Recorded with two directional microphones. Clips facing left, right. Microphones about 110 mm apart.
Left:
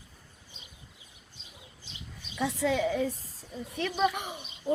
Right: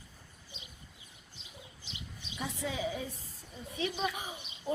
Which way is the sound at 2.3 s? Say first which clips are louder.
Left 9 dB; 85° left.